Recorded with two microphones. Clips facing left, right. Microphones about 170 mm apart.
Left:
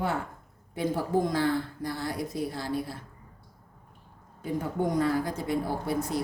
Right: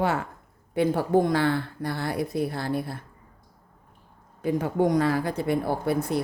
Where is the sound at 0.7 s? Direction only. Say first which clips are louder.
Right 5 dB; 65° right (ahead or behind).